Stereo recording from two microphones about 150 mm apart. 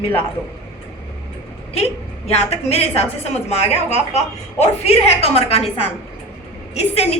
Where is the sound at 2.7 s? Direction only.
45° left (ahead or behind).